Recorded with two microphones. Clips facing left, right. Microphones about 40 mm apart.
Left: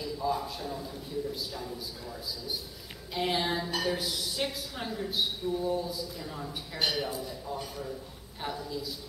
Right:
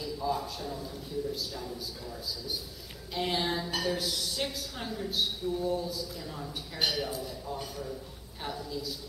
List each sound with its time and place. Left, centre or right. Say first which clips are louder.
0.0 s a man's voice: left 1 dB; centre